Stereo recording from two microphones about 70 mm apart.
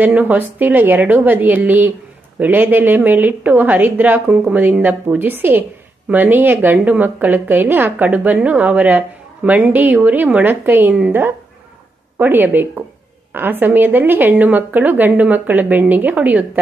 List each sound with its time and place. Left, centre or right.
0.0 s a woman's voice: right